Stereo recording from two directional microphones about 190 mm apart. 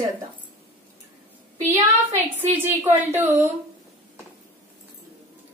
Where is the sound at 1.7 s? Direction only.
15° right (ahead or behind).